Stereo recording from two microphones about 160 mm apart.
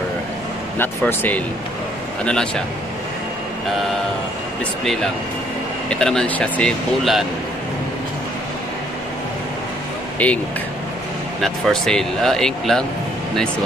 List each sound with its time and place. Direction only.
0.7 s speech: 10° left (ahead or behind)
5.9 s speech: 5° left (ahead or behind)
10.1 s speech: 10° left (ahead or behind)
11.4 s speech: centre (ahead or behind)